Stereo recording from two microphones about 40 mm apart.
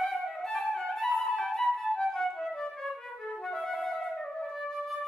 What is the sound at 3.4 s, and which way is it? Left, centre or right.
Flute, centre.